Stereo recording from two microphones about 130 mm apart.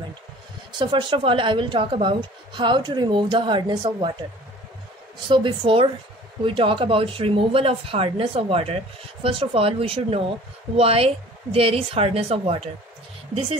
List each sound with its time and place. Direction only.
0.7 s a woman's voice: 40° right (ahead or behind)
5.3 s a woman's voice: 40° right (ahead or behind)